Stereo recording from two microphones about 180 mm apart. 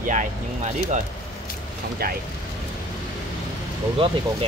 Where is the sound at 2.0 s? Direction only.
55° right (ahead or behind).